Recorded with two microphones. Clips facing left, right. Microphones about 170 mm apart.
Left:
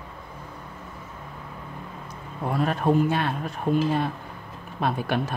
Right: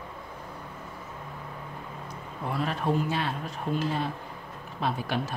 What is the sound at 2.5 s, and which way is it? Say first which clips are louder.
Speech: left 6 dB; 50° left (ahead or behind).